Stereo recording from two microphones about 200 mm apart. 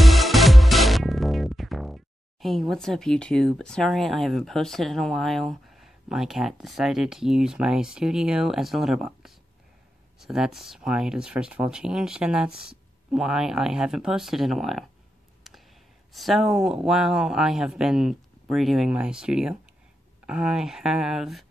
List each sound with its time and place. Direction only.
0.0 s music: centre (ahead or behind)
2.4 s speech: centre (ahead or behind)
15.5 s a sound: centre (ahead or behind)
16.1 s speech: centre (ahead or behind)